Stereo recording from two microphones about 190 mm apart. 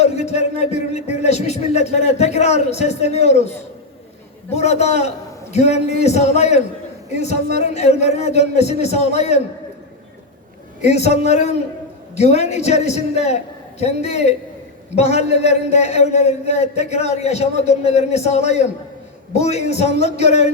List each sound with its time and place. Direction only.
0.0 s a man's voice: 35° left (ahead or behind)
4.5 s a man's voice: 35° left (ahead or behind)
10.8 s a man's voice: 35° left (ahead or behind)